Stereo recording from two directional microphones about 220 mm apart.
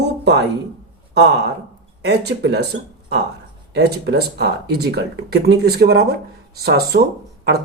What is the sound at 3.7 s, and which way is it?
Speech, 50° right (ahead or behind).